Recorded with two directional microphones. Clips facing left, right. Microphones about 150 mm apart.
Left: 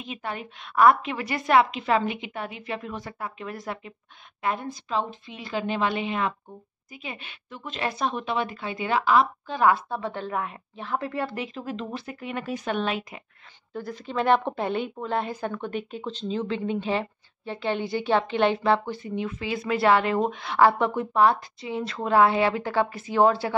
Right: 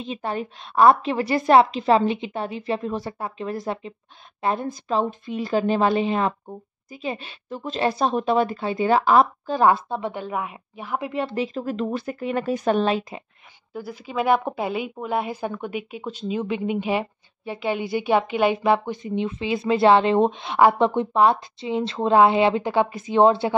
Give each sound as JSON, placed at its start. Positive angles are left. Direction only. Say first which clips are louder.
{"t": 0.0, "sound": "a woman's voice", "louder": "right 6 dB", "side_deg": -30}
{"t": 4.6, "sound": "a woman's voice", "louder": "right 5 dB", "side_deg": -45}
{"t": 9.8, "sound": "a woman's voice", "louder": "right 3 dB", "side_deg": -15}
{"t": 11.6, "sound": "a woman's voice", "louder": "right 7 dB", "side_deg": -45}
{"t": 13.7, "sound": "a woman's voice", "louder": "right 2 dB", "side_deg": -5}